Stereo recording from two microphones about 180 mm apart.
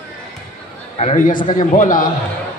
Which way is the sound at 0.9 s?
40° left (ahead or behind).